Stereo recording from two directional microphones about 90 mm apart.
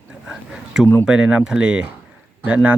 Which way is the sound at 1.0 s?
10° right (ahead or behind).